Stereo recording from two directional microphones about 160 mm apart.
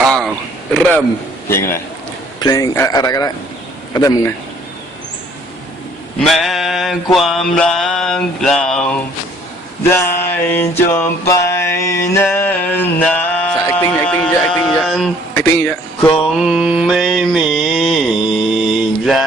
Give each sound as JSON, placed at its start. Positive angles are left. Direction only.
{"t": 0.0, "sound": "a sound", "side_deg": 0}
{"t": 1.5, "sound": "mantra", "side_deg": 15}
{"t": 2.4, "sound": "a man's voice", "side_deg": 20}
{"t": 6.1, "sound": "mantra", "side_deg": 0}
{"t": 10.5, "sound": "mantra", "side_deg": 15}
{"t": 13.7, "sound": "speech", "side_deg": 10}
{"t": 16.1, "sound": "mantra", "side_deg": 0}